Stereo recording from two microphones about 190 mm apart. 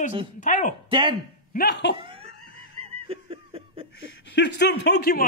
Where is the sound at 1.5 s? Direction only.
55° left (ahead or behind).